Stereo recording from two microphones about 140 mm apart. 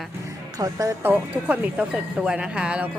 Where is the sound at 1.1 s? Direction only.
10° right (ahead or behind).